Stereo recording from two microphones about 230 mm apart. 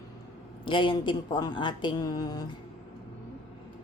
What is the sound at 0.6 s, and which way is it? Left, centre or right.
Speech, left.